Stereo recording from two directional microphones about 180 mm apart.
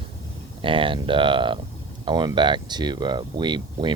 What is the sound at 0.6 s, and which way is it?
Speech, 30° right (ahead or behind).